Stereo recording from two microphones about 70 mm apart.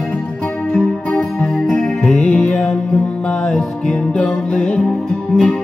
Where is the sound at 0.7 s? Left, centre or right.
Centre.